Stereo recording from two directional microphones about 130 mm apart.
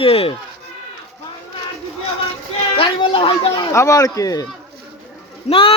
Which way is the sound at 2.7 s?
40° left (ahead or behind).